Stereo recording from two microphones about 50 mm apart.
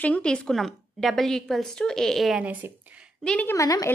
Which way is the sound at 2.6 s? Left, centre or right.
Right.